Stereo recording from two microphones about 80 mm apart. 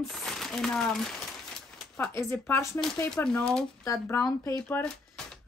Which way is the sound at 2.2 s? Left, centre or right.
Left.